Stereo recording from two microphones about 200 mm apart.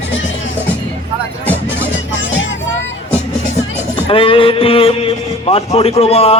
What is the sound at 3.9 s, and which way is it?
A man's voice, 25° left (ahead or behind).